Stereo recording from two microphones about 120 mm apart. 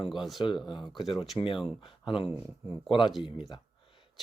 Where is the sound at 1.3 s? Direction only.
45° left (ahead or behind).